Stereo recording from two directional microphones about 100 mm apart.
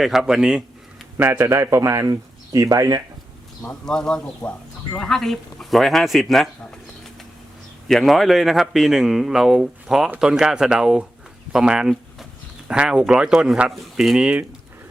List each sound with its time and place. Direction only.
0.0 s speech: 5° right (ahead or behind)
1.1 s a man's voice: 20° right (ahead or behind)
3.7 s speech: 5° left (ahead or behind); by 14.4 s 10° right (ahead or behind)